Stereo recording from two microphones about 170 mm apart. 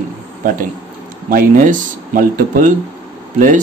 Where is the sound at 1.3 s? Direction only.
50° right (ahead or behind).